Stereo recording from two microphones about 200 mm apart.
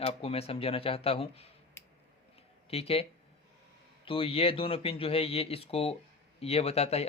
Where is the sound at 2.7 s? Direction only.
30° left (ahead or behind).